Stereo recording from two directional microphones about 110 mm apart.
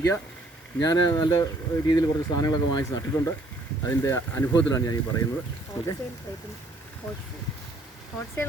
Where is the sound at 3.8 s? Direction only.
30° left (ahead or behind).